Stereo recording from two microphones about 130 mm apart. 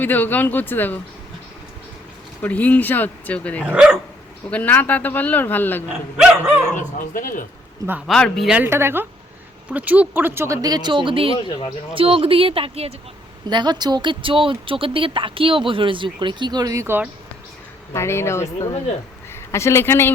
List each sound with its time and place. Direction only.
0.0 s a man's voice: 15° left (ahead or behind)
2.4 s a man's voice: 10° left (ahead or behind)
3.7 s a woman's voice: 10° right (ahead or behind)
4.4 s a man's voice: 10° left (ahead or behind)
6.7 s speech: 90° left
8.0 s speech: 5° left (ahead or behind)
8.4 s a woman's voice: 15° right (ahead or behind); by 12.9 s 45° right (ahead or behind)
13.5 s speech: 35° right (ahead or behind); by 17.1 s 15° right (ahead or behind)
17.9 s speech: 20° left (ahead or behind)